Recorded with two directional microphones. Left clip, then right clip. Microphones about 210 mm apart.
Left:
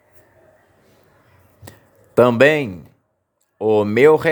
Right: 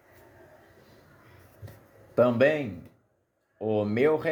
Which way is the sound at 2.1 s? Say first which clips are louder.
Left 10 dB; 50° left (ahead or behind).